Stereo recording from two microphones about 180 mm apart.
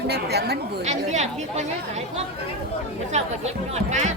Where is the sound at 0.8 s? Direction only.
40° right (ahead or behind).